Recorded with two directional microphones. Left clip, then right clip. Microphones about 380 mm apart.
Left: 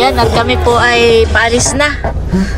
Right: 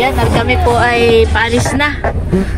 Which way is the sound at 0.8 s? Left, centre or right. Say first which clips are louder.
Left 4 dB; left.